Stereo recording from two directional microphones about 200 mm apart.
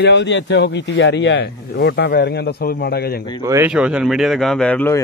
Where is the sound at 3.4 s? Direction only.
15° right (ahead or behind).